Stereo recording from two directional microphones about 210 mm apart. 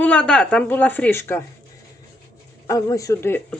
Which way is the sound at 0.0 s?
5° left (ahead or behind).